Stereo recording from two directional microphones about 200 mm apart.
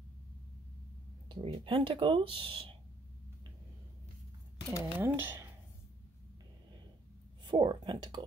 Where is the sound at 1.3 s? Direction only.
25° right (ahead or behind).